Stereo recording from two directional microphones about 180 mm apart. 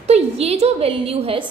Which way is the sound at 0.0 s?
35° right (ahead or behind).